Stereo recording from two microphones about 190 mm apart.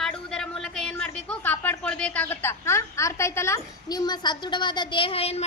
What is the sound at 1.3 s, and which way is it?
A woman's voice, 10° left (ahead or behind).